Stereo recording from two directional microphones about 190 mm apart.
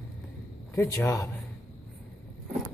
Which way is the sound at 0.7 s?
15° left (ahead or behind).